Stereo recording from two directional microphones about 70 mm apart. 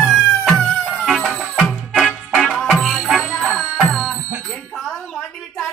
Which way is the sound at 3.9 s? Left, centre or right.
Centre.